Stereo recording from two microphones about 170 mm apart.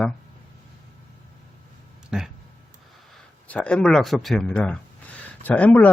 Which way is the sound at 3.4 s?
10° left (ahead or behind).